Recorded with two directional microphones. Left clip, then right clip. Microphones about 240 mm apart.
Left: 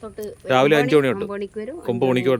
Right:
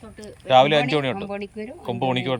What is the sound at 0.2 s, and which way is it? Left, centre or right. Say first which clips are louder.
Speech: right 2 dB; centre.